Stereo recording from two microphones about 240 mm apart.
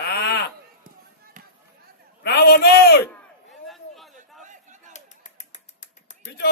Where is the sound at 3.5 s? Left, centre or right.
Centre.